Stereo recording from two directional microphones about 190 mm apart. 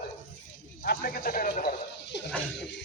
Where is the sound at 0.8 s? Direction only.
50° left (ahead or behind).